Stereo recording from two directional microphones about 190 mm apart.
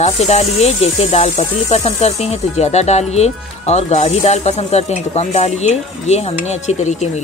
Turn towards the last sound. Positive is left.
turn(degrees=35)  # may be behind; listen again after turning